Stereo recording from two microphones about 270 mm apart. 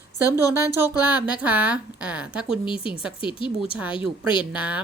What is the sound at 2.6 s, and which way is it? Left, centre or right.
Speech, centre.